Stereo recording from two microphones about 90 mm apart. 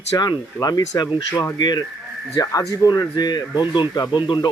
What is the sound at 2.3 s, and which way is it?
Speech, 40° left (ahead or behind).